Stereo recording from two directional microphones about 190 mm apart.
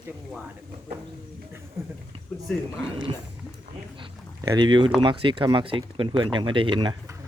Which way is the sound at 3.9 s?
25° right (ahead or behind).